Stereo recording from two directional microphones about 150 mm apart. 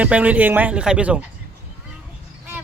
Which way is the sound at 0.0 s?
10° right (ahead or behind).